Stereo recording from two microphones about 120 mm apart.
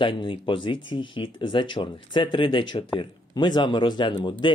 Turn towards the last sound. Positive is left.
turn(degrees=40)  # may be behind; listen again after turning